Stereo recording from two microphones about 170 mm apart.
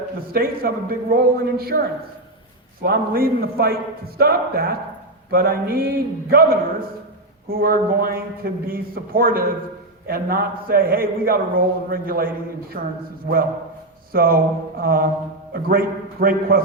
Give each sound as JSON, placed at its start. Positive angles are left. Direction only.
{"t": 0.3, "sound": "a man's voice", "side_deg": -60}
{"t": 2.8, "sound": "a man's voice", "side_deg": -60}
{"t": 14.1, "sound": "a man's voice", "side_deg": -60}